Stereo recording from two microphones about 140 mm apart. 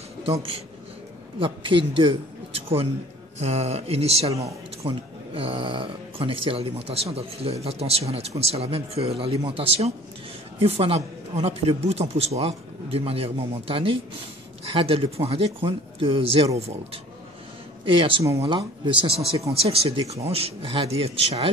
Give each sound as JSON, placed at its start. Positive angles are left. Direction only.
{"t": 0.3, "sound": "a man's voice", "side_deg": -40}